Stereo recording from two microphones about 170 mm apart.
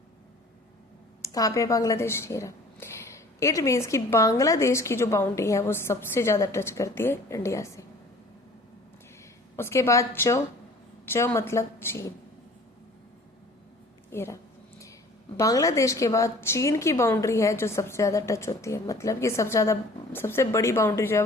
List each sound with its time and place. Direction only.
1.2 s speech: 20° left (ahead or behind)
9.6 s speech: 15° left (ahead or behind)
14.1 s speech: 15° left (ahead or behind)
15.4 s speech: 20° left (ahead or behind)